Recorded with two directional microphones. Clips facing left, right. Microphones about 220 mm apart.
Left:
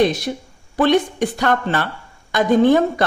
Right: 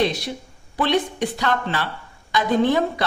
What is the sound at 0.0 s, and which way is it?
A woman's voice, 45° left (ahead or behind).